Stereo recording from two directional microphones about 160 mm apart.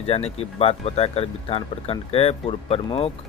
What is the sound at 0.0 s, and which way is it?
Speech, 40° left (ahead or behind).